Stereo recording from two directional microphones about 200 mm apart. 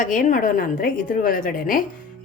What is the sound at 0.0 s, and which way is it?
A woman's voice, 40° left (ahead or behind).